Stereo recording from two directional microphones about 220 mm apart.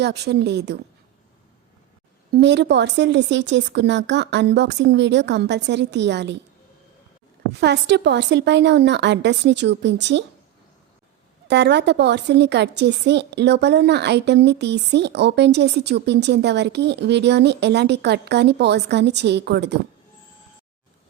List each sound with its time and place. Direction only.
0.0 s a woman's voice: 50° right (ahead or behind)
2.3 s a woman's voice: 50° right (ahead or behind)
7.6 s a woman's voice: 50° right (ahead or behind)
11.4 s a woman's voice: 50° right (ahead or behind)